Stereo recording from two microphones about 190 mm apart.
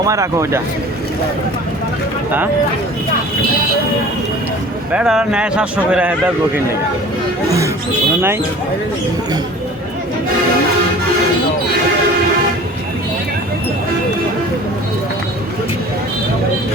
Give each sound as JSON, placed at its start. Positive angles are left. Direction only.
{"t": 0.0, "sound": "speech", "side_deg": -15}
{"t": 4.9, "sound": "speech", "side_deg": -5}